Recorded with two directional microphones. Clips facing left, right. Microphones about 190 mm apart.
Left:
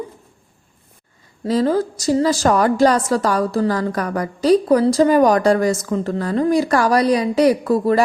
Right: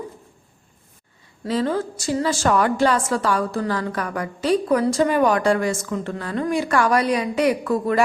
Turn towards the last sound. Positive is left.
turn(degrees=35)  # may be behind; listen again after turning